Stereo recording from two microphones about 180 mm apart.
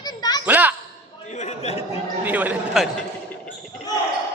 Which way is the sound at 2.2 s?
10° right (ahead or behind).